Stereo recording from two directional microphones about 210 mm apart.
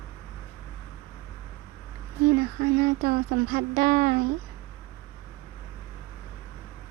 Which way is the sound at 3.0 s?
45° right (ahead or behind).